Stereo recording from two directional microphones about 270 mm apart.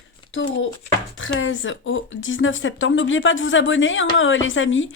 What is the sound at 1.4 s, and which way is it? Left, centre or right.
A woman's voice, left.